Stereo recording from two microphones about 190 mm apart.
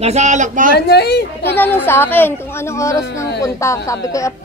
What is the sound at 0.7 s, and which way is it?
Speech, 60° left (ahead or behind).